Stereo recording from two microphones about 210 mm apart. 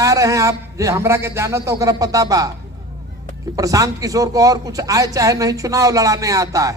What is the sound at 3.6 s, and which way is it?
A man's voice, 15° right (ahead or behind).